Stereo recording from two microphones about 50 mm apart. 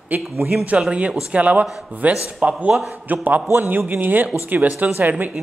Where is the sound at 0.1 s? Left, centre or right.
Right.